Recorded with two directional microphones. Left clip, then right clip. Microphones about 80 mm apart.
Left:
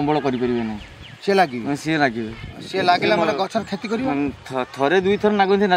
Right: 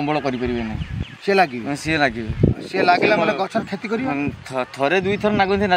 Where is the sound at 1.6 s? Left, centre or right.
Centre.